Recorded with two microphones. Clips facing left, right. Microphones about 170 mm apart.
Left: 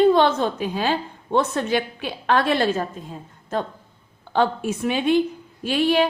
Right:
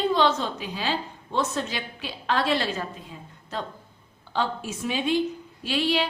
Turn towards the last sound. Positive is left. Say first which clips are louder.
# left 6 dB
turn(degrees=50)  # may be behind; listen again after turning